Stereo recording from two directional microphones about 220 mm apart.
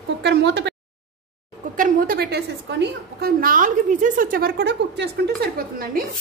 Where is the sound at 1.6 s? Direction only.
40° right (ahead or behind).